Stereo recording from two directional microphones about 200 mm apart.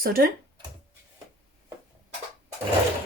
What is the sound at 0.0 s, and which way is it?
Speech, 45° right (ahead or behind).